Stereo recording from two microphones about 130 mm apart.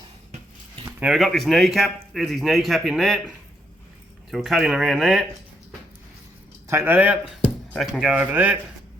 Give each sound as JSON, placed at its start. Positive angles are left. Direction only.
{"t": 0.9, "sound": "speech", "side_deg": -5}
{"t": 6.7, "sound": "speech", "side_deg": -15}
{"t": 7.8, "sound": "speech", "side_deg": 0}